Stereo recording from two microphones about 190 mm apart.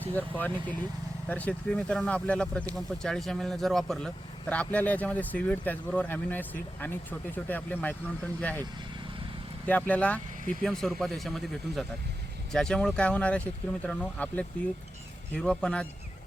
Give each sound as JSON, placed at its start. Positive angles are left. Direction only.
{"t": 0.0, "sound": "speech", "side_deg": 10}
{"t": 9.6, "sound": "speech", "side_deg": 10}